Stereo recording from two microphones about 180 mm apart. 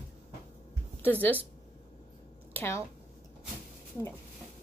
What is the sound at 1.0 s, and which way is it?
Speech, 10° left (ahead or behind).